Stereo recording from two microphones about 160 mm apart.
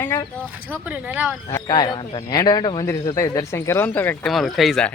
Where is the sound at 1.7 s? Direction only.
30° left (ahead or behind); by 4.3 s 10° left (ahead or behind).